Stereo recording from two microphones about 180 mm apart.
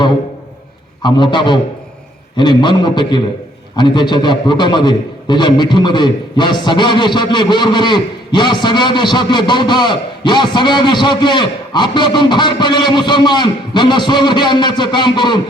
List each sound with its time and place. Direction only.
1.0 s a man's voice: 25° left (ahead or behind)